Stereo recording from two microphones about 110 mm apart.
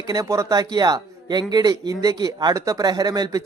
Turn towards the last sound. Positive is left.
turn(degrees=-35)  # may be behind; listen again after turning